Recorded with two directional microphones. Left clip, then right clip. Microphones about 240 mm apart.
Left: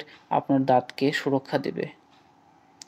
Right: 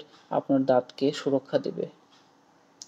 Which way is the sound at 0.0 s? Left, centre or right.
Left.